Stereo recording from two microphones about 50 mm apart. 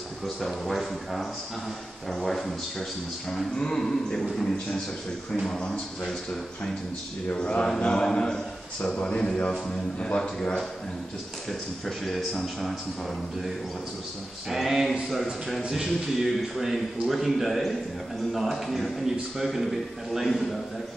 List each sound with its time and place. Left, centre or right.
0.2 s a man's voice: centre
7.2 s a man's voice: left
11.8 s a man's voice: centre
14.5 s a man's voice: centre